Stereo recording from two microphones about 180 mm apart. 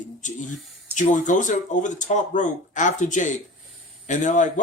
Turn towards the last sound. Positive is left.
turn(degrees=45)  # may be behind; listen again after turning